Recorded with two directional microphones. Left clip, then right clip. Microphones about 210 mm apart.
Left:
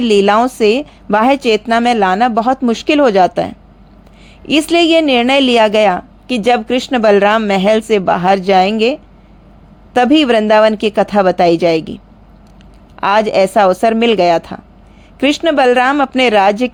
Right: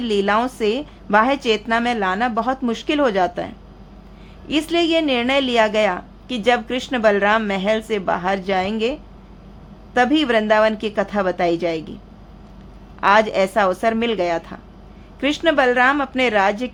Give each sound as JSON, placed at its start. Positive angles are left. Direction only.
{"t": 0.0, "sound": "a woman's voice", "side_deg": 30}
{"t": 13.0, "sound": "a woman's voice", "side_deg": 30}